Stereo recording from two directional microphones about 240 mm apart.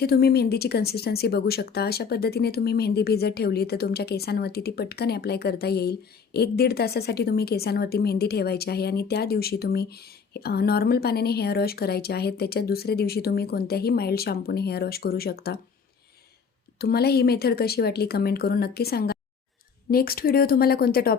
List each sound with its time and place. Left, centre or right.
0.0 s speech: left
16.7 s speech: left